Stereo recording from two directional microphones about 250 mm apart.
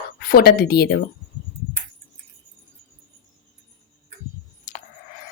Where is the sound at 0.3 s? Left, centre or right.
Left.